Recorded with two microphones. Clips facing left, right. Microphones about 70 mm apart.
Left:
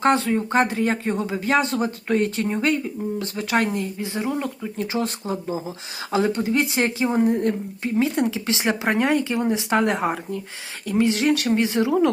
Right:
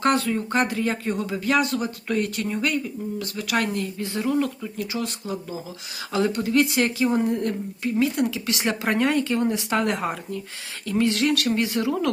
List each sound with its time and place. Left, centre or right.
0.0 s speech: left
4.8 s speech: left